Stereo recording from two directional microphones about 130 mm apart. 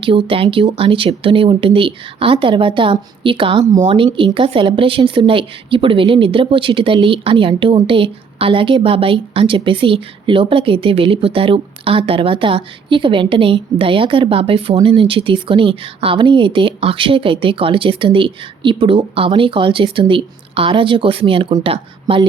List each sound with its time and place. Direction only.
0.0 s speech: 40° right (ahead or behind)